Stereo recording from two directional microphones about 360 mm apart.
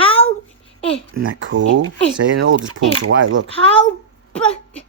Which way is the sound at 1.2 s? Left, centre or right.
Right.